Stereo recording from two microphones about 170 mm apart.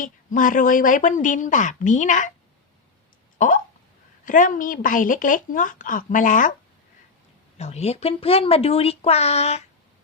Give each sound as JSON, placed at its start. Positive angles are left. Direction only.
{"t": 0.0, "sound": "speech", "side_deg": 50}
{"t": 3.3, "sound": "speech", "side_deg": 50}
{"t": 7.6, "sound": "speech", "side_deg": 40}